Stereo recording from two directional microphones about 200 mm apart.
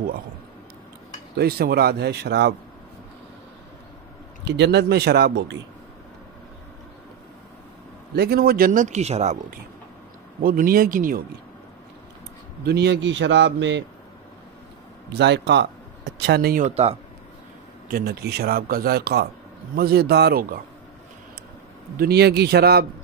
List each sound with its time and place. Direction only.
1.3 s speech: 50° right (ahead or behind)
4.5 s a man's voice: 60° right (ahead or behind)
8.2 s speech: 50° right (ahead or behind)
10.4 s speech: 45° right (ahead or behind)
12.6 s a man's voice: 55° right (ahead or behind)
15.1 s speech: 60° right (ahead or behind)
16.6 s a man's voice: 30° right (ahead or behind)
17.8 s speech: 50° right (ahead or behind)
21.9 s speech: 50° right (ahead or behind)